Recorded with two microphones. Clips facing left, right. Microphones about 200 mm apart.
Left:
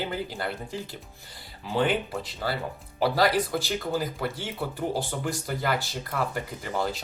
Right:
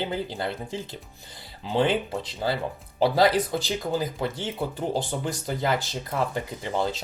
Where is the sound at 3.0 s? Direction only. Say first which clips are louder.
Right 3 dB; 20° right (ahead or behind).